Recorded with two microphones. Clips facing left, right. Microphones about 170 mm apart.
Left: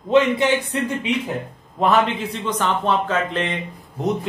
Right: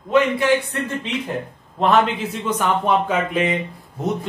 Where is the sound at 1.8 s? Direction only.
Centre (ahead or behind).